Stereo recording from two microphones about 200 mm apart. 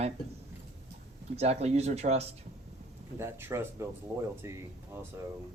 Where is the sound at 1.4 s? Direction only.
35° right (ahead or behind).